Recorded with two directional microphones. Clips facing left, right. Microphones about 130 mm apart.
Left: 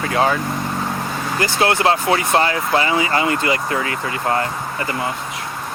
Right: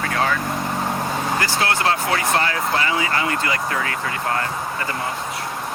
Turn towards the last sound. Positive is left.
turn(degrees=25)  # may be behind; listen again after turning